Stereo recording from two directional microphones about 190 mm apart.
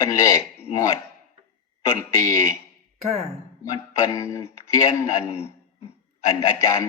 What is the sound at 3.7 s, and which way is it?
A man's voice, 15° left (ahead or behind).